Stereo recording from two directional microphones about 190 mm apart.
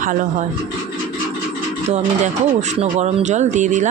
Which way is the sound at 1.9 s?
35° right (ahead or behind).